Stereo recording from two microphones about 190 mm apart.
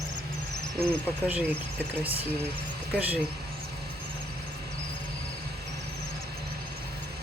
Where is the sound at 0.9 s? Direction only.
10° right (ahead or behind).